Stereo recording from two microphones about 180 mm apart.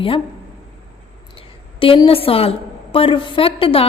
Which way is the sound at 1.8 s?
30° left (ahead or behind).